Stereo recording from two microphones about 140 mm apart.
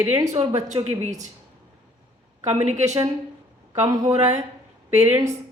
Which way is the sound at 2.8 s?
55° right (ahead or behind).